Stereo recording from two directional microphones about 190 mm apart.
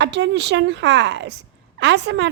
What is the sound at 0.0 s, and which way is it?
A woman's voice, 65° right (ahead or behind).